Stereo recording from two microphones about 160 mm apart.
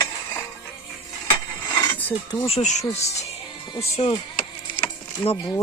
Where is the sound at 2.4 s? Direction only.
45° left (ahead or behind).